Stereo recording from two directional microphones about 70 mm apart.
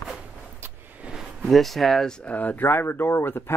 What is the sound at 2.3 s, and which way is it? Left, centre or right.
Speech, left.